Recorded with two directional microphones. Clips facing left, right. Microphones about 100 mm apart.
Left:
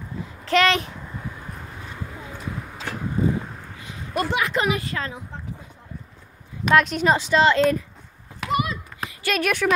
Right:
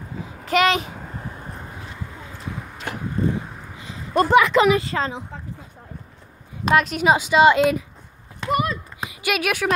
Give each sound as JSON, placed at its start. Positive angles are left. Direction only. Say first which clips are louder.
{"t": 0.5, "sound": "a child's voice", "louder": "right 1 dB", "side_deg": -5}
{"t": 1.2, "sound": "vehicle", "louder": "right 1 dB", "side_deg": -30}
{"t": 3.8, "sound": "a sound", "louder": "right 6 dB", "side_deg": -30}
{"t": 4.4, "sound": "speech", "louder": "right 10 dB", "side_deg": -90}
{"t": 4.7, "sound": "speech", "louder": "right 6 dB", "side_deg": -25}
{"t": 6.7, "sound": "speech", "louder": "right 1 dB", "side_deg": -5}
{"t": 8.5, "sound": "a sound", "louder": "right 2 dB", "side_deg": -45}
{"t": 9.0, "sound": "speech", "louder": "even", "side_deg": -10}